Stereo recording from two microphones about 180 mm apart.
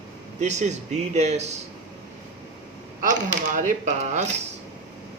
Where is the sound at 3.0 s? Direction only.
45° right (ahead or behind).